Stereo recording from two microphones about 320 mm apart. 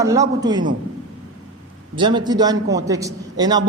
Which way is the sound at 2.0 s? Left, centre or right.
Centre.